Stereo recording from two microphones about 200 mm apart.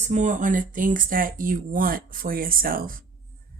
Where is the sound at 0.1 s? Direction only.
35° right (ahead or behind).